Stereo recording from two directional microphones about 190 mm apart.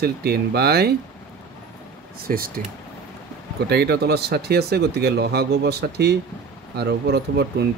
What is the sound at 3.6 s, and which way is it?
Speech, 60° right (ahead or behind).